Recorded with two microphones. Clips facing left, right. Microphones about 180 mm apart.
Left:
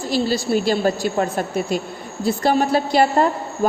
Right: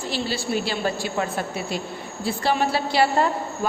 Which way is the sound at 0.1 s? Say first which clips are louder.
Left 7 dB; 40° left (ahead or behind).